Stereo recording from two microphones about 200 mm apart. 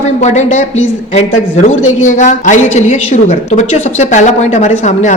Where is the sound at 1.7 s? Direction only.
40° left (ahead or behind).